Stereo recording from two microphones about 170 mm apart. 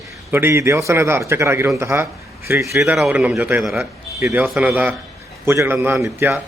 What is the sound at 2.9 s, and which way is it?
A man's voice, 5° right (ahead or behind).